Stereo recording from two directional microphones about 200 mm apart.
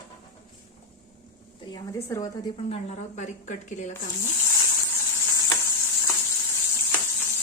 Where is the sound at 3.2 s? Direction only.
35° left (ahead or behind).